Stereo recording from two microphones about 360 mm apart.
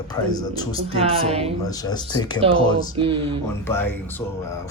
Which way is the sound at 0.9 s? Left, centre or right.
Centre.